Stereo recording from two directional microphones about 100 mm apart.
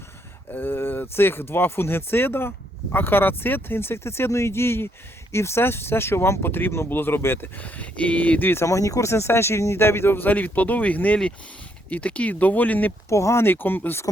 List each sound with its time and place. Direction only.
0.5 s speech: 20° left (ahead or behind)
8.6 s speech: 35° left (ahead or behind); by 12.9 s 15° left (ahead or behind)
13.1 s speech: 30° left (ahead or behind)